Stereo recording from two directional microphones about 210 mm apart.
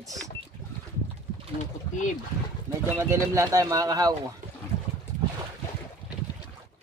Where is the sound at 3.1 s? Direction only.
15° right (ahead or behind).